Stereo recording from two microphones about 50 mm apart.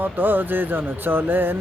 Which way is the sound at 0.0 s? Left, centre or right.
Right.